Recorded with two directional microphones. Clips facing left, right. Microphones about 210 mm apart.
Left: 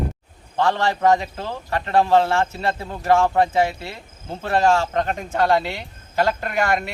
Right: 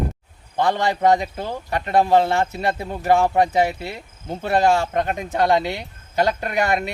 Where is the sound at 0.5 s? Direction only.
15° right (ahead or behind).